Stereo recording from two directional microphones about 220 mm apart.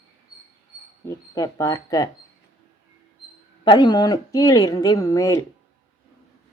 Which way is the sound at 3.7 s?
20° left (ahead or behind).